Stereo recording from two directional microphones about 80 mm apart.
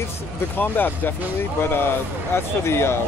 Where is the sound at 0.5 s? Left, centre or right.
Left.